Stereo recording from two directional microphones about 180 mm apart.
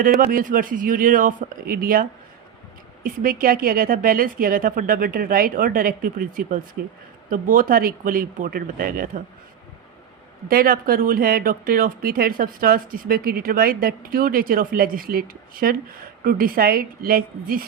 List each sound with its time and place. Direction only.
0.2 s speech: 50° right (ahead or behind)
10.5 s speech: 55° right (ahead or behind)